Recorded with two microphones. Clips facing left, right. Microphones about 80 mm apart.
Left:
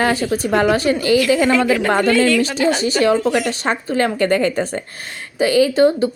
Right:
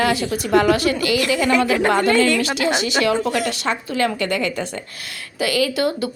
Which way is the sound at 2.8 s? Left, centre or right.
Left.